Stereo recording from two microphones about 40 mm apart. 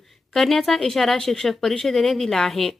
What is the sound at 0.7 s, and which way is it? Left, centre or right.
Speech, centre.